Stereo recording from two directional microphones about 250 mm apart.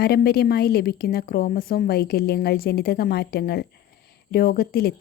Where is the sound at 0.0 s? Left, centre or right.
Left.